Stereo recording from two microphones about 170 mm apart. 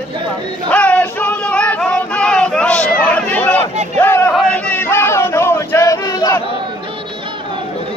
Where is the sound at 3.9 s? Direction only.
10° left (ahead or behind).